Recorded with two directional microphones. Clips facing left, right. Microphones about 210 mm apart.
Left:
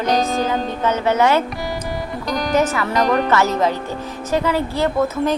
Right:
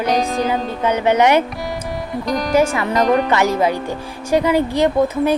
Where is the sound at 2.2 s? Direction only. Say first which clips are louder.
Right 2 dB; centre (ahead or behind); by 5.3 s 15° right (ahead or behind).